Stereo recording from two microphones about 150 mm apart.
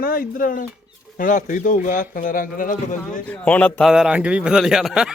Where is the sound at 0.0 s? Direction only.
75° left (ahead or behind).